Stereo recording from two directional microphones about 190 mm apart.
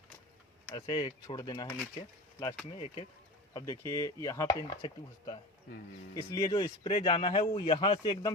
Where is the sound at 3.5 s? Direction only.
20° left (ahead or behind).